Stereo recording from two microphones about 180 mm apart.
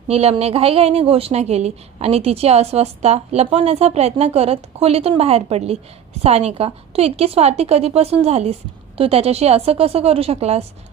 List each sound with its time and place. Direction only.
0.1 s a woman's voice: 35° right (ahead or behind)